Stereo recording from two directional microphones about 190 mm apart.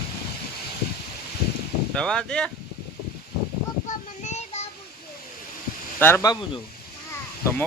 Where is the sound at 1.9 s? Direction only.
5° left (ahead or behind).